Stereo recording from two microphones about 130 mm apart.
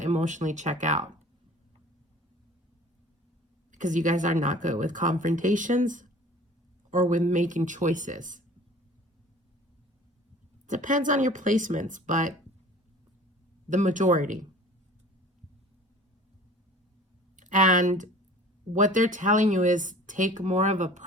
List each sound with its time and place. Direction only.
0.0 s speech: 65° right (ahead or behind)
3.7 s speech: 75° right (ahead or behind)
10.7 s speech: 80° right
13.7 s speech: 75° right (ahead or behind)
17.3 s speech: 75° right (ahead or behind)